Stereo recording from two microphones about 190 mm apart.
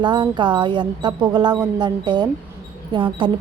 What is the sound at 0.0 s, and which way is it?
Speech, 25° right (ahead or behind).